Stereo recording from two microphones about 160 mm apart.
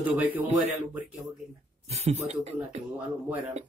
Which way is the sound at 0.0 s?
10° right (ahead or behind).